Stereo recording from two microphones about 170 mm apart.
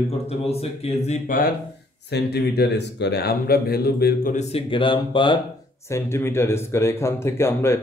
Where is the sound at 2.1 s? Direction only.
70° left (ahead or behind).